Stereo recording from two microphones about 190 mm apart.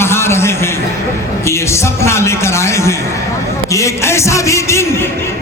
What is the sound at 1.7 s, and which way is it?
Music, 15° left (ahead or behind).